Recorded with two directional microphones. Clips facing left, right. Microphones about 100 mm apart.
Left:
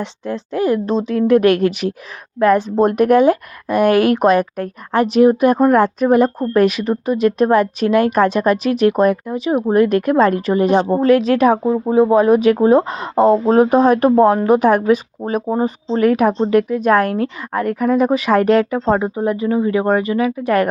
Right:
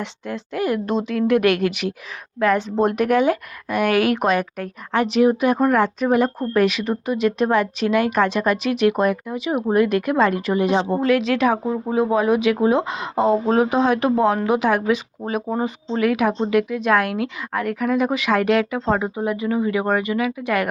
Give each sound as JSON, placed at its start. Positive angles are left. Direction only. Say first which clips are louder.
{"t": 0.0, "sound": "a woman's voice", "louder": "left 5 dB", "side_deg": 35}